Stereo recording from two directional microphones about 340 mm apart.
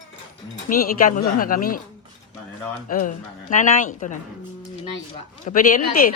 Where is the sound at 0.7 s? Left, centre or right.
Left.